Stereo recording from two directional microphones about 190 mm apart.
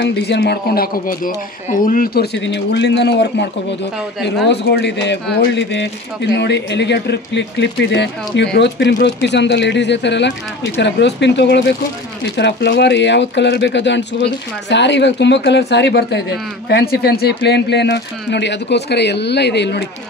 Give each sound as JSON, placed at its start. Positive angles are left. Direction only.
{"t": 0.0, "sound": "a man's voice", "side_deg": 65}
{"t": 2.3, "sound": "speech", "side_deg": 70}